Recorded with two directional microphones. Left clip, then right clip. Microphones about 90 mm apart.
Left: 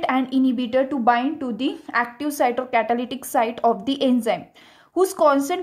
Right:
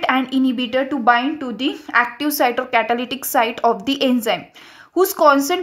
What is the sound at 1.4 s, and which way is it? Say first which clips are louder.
Speech: right 3 dB; 30° left (ahead or behind).